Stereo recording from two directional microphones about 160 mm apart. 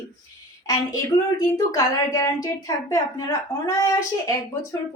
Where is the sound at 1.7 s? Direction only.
20° left (ahead or behind).